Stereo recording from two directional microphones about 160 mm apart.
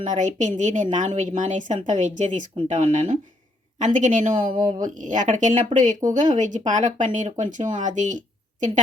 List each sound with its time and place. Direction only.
0.0 s speech: 50° right (ahead or behind)